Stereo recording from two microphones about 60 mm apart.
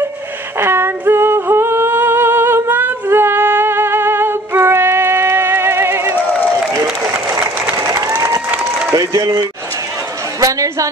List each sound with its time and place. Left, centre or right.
0.6 s singing: right
7.7 s applause: right
8.9 s a woman's voice: right